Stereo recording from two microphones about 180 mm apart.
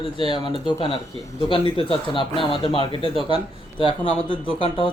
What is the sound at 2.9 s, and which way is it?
Speech, 30° right (ahead or behind).